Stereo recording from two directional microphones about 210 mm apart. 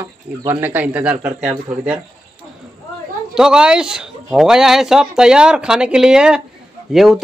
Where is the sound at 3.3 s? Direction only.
5° right (ahead or behind).